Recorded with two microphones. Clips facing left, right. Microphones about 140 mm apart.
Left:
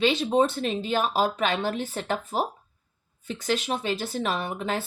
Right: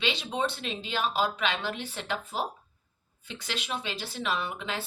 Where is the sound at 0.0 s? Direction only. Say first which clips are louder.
Left 9 dB; 45° left (ahead or behind).